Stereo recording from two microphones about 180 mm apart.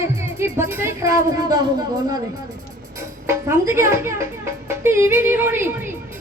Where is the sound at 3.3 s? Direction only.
15° right (ahead or behind).